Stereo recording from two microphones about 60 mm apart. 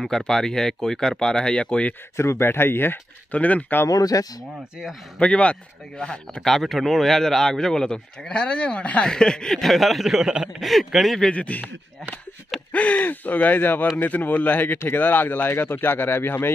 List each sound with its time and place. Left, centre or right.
0.0 s speech: centre
2.1 s speech: left
3.3 s speech: left
3.9 s speech: left
5.2 s speech: left; by 10.5 s centre
10.6 s speech: centre
11.2 s speech: left
12.7 s speech: left